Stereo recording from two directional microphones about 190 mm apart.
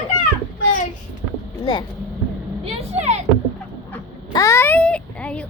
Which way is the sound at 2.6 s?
35° right (ahead or behind).